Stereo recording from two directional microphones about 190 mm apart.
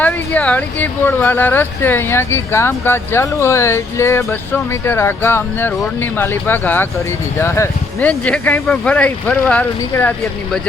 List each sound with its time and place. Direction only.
0.0 s speech: 10° left (ahead or behind)